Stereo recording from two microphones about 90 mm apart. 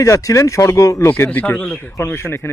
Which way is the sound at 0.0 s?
35° left (ahead or behind).